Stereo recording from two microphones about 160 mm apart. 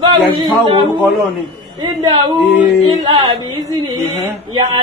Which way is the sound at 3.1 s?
30° right (ahead or behind).